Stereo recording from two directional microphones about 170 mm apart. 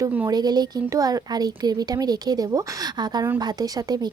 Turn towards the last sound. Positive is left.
turn(degrees=-20)  # may be behind; listen again after turning